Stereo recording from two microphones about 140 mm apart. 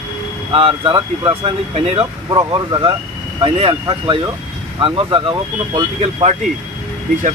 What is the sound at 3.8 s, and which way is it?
Speech, 25° right (ahead or behind).